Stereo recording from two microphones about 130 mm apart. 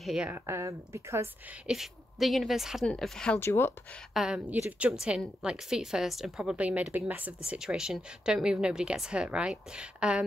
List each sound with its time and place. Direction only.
0.0 s speech: 5° right (ahead or behind)
0.3 s speech: 20° right (ahead or behind)
1.7 s a woman's voice: centre (ahead or behind)
3.3 s speech: 20° left (ahead or behind)
4.1 s a woman's voice: 5° right (ahead or behind)